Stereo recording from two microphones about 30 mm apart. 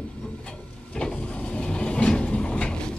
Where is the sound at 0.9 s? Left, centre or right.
Left.